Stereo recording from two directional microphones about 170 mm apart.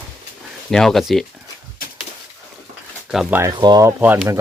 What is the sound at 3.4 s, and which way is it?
Speech, 25° right (ahead or behind).